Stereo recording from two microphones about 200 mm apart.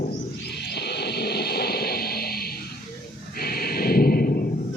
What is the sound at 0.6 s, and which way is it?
Music, 55° left (ahead or behind).